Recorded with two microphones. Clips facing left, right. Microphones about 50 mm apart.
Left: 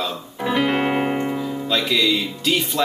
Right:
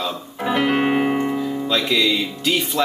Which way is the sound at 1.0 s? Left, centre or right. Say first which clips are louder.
Right 2 dB; centre.